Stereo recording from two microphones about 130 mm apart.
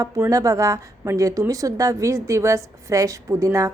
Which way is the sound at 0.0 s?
25° right (ahead or behind).